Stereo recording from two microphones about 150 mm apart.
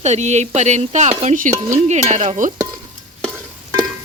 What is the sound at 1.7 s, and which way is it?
Stir, 50° right (ahead or behind).